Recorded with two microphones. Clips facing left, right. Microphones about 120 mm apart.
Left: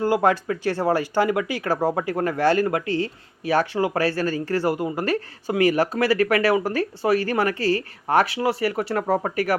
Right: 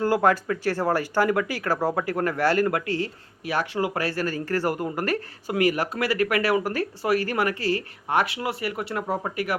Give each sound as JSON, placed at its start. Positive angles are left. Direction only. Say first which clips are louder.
{"t": 0.0, "sound": "speech", "louder": "left 1 dB", "side_deg": 20}